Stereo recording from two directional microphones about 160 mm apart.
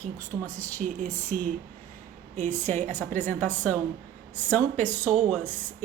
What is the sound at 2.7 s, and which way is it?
Speech, 50° right (ahead or behind).